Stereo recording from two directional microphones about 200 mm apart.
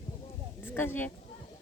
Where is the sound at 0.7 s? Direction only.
10° left (ahead or behind).